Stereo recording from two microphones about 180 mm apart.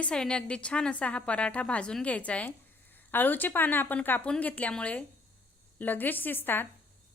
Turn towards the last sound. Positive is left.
turn(degrees=10)  # may be behind; listen again after turning